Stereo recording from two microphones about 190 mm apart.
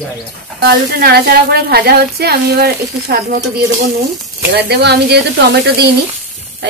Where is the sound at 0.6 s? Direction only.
55° right (ahead or behind).